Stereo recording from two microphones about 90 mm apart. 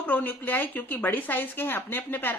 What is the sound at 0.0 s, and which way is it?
A woman's voice, 20° left (ahead or behind).